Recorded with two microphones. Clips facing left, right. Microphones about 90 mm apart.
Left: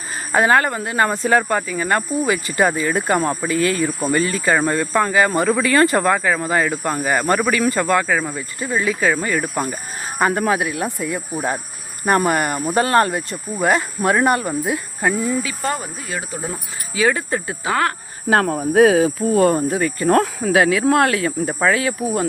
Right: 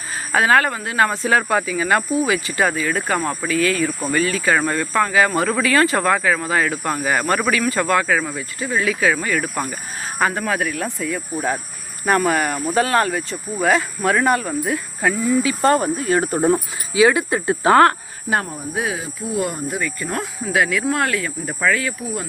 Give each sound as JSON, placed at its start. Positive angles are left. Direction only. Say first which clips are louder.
{"t": 0.3, "sound": "speech", "louder": "left 1 dB", "side_deg": 0}
{"t": 3.2, "sound": "speech", "louder": "left 3 dB", "side_deg": 20}
{"t": 3.8, "sound": "speech", "louder": "left 1 dB", "side_deg": 0}
{"t": 15.6, "sound": "cricket", "louder": "right 8 dB", "side_deg": -40}
{"t": 16.2, "sound": "speech", "louder": "right 11 dB", "side_deg": -55}
{"t": 16.9, "sound": "speech", "louder": "right 3 dB", "side_deg": -15}
{"t": 17.6, "sound": "cricket", "louder": "right 8 dB", "side_deg": -40}
{"t": 18.3, "sound": "cricket", "louder": "left 10 dB", "side_deg": 75}
{"t": 19.4, "sound": "speech", "louder": "left 7 dB", "side_deg": 50}
{"t": 20.8, "sound": "speech", "louder": "left 5 dB", "side_deg": 35}